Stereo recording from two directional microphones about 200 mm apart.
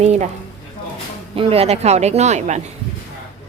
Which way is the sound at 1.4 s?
30° right (ahead or behind).